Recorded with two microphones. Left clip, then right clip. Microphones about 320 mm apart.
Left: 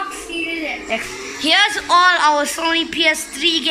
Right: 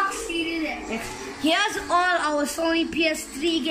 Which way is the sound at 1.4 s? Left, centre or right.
Centre.